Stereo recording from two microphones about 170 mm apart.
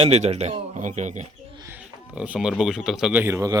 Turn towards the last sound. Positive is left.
turn(degrees=-15)  # may be behind; listen again after turning